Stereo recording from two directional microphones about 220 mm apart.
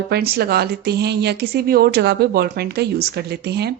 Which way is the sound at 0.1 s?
45° right (ahead or behind).